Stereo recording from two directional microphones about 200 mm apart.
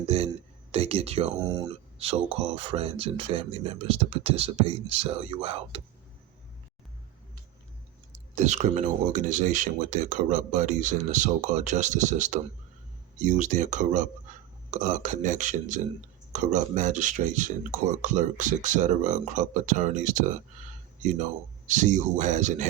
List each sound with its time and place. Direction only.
0.1 s speech: 30° right (ahead or behind)
8.4 s speech: 35° right (ahead or behind)
14.3 s burping: 40° right (ahead or behind)
14.7 s speech: 40° right (ahead or behind)